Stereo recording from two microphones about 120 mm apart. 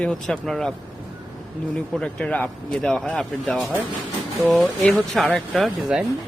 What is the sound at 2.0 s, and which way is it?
Speech, 5° left (ahead or behind).